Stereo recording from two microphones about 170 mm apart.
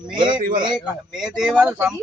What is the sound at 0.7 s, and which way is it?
A man's voice, 5° right (ahead or behind).